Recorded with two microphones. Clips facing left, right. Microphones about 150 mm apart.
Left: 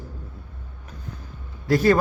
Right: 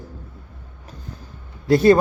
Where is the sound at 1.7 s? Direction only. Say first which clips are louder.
Right 5 dB; 30° right (ahead or behind).